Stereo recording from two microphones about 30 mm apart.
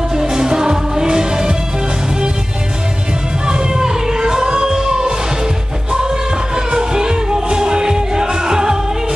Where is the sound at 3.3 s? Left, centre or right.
Right.